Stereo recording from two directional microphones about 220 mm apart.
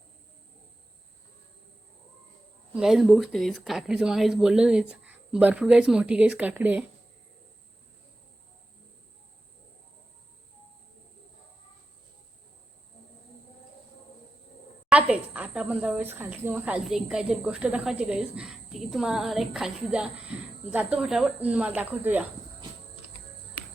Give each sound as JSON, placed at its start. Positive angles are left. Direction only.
{"t": 2.7, "sound": "speech", "side_deg": 0}
{"t": 14.8, "sound": "speech", "side_deg": -5}